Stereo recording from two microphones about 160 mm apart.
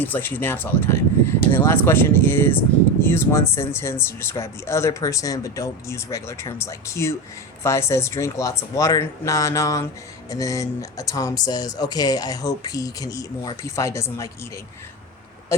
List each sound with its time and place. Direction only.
0.0 s speech: 10° left (ahead or behind)